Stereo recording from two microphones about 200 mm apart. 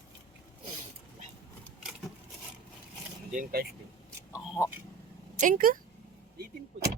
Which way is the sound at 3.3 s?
50° right (ahead or behind).